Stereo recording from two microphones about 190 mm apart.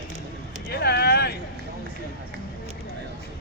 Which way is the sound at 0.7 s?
60° left (ahead or behind).